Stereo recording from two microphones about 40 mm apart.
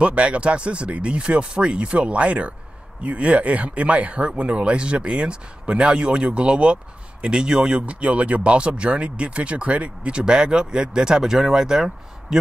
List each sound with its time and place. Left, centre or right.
0.0 s speech: right
7.8 s speech: right; by 12.4 s centre